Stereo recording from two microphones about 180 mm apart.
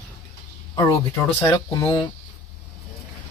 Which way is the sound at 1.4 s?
10° left (ahead or behind).